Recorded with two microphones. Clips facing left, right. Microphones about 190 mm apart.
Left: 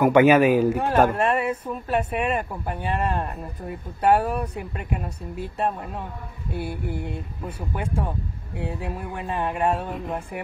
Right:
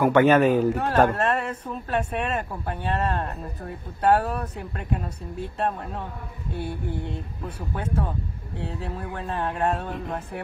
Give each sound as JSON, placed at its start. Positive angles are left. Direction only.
{"t": 0.0, "sound": "speech", "side_deg": 10}